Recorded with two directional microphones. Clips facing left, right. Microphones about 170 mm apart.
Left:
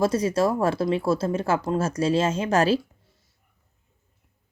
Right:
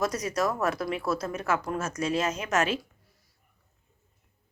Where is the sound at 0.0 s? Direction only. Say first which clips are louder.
Left 6 dB; 30° left (ahead or behind).